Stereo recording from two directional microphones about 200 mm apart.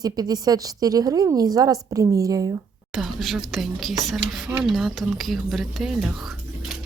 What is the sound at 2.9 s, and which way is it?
Speech, centre (ahead or behind).